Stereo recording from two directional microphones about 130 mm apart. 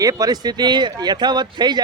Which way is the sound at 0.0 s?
25° right (ahead or behind).